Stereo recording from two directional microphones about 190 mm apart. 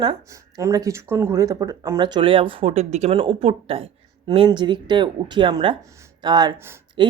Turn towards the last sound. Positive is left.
turn(degrees=-25)  # may be behind; listen again after turning